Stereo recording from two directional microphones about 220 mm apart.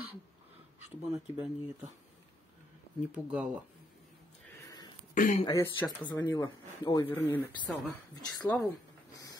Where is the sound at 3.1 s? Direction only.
5° right (ahead or behind).